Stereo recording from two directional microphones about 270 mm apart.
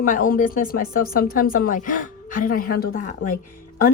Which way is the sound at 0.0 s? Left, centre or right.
Left.